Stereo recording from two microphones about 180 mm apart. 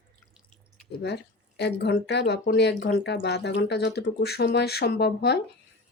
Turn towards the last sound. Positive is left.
turn(degrees=65)  # may be behind; listen again after turning